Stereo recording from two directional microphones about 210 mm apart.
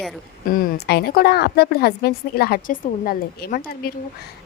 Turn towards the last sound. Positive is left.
turn(degrees=45)  # may be behind; listen again after turning